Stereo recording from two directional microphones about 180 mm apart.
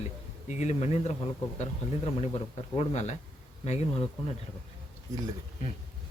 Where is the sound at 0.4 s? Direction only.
40° left (ahead or behind).